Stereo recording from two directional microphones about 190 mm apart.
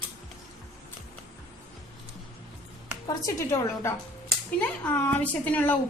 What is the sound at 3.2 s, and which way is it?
A woman's voice, 15° left (ahead or behind).